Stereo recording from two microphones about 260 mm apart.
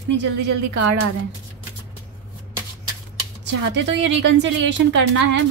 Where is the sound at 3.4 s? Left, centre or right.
Right.